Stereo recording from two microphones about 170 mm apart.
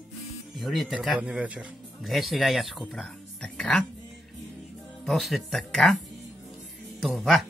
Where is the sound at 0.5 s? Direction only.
Centre (ahead or behind).